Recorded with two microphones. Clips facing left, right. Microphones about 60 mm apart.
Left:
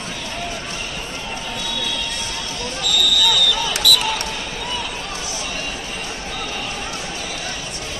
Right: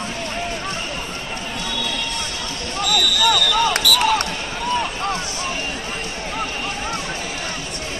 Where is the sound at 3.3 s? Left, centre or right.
Right.